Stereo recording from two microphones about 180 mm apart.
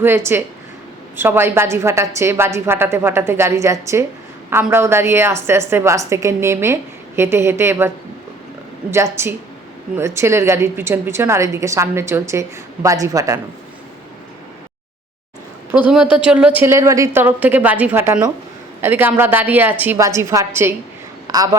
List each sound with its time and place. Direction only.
0.3 s a woman's voice: 10° right (ahead or behind)
9.2 s a woman's voice: 15° right (ahead or behind)
15.7 s a woman's voice: 5° right (ahead or behind)